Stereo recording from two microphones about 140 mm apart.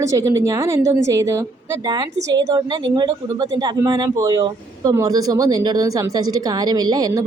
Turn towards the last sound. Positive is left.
turn(degrees=-30)  # may be behind; listen again after turning